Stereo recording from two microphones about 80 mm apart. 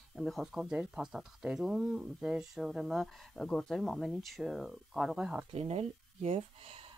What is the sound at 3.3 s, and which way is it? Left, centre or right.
Speech, centre.